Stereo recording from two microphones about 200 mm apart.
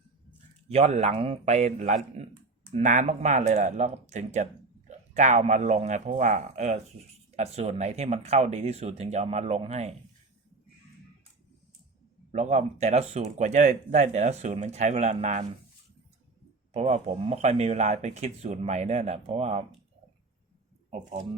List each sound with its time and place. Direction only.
0.7 s speech: 35° right (ahead or behind)
12.3 s speech: 35° right (ahead or behind)
16.7 s speech: 30° right (ahead or behind)